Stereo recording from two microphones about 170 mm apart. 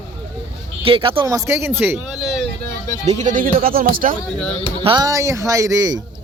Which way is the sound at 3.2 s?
50° right (ahead or behind).